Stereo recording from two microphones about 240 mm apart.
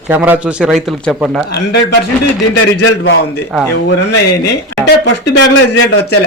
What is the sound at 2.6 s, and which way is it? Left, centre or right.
Speech, left.